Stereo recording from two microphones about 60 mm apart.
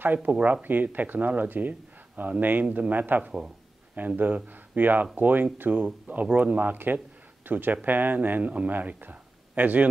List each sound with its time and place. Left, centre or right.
0.0 s speech: right
3.3 s speech: centre
4.0 s speech: right